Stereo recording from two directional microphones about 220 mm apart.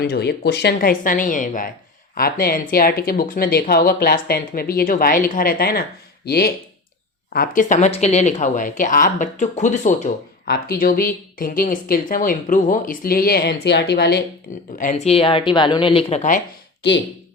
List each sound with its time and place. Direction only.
0.0 s speech: 50° left (ahead or behind)
14.8 s speech: 35° left (ahead or behind)
16.8 s speech: 50° left (ahead or behind)